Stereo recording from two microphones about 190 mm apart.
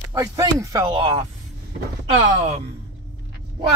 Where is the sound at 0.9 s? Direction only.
30° right (ahead or behind).